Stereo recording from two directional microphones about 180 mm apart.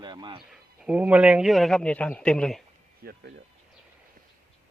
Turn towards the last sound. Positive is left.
turn(degrees=-60)  # may be behind; listen again after turning